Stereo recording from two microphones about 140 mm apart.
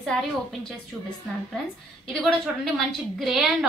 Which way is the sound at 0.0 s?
Centre (ahead or behind).